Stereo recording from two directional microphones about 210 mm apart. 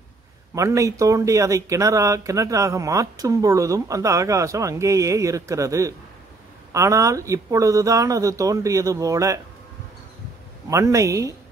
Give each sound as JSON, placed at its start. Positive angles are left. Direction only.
{"t": 0.6, "sound": "speech", "side_deg": -15}
{"t": 10.7, "sound": "speech", "side_deg": -15}